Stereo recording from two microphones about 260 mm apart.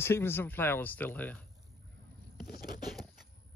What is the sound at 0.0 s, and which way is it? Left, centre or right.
Speech, centre.